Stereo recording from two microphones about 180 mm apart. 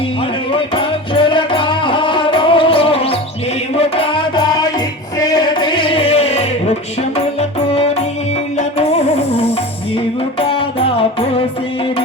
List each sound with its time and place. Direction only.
0.5 s music: 30° left (ahead or behind)
8.5 s music: 35° left (ahead or behind)